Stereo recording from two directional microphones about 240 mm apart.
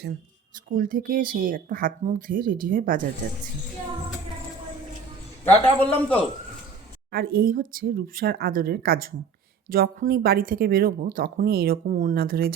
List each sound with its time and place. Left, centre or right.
0.7 s a woman's voice: right
5.5 s a man's voice: centre
7.1 s a woman's voice: right